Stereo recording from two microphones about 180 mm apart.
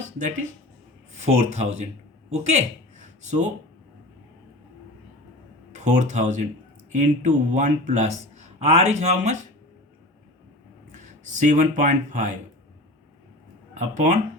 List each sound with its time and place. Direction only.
1.2 s speech: 40° right (ahead or behind)
5.8 s speech: 45° right (ahead or behind)
10.9 s speech: 45° right (ahead or behind)
13.7 s speech: 40° right (ahead or behind)